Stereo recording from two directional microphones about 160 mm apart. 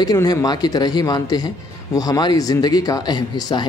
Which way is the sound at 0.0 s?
25° left (ahead or behind).